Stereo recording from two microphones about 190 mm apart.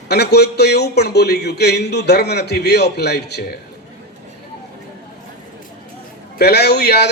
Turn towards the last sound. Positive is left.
turn(degrees=60)  # may be behind; listen again after turning